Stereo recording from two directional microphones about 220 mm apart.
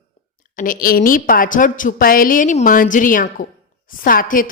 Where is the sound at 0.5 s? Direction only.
40° left (ahead or behind).